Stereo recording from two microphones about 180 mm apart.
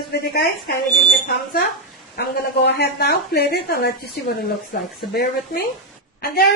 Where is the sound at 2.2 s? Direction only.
65° left (ahead or behind).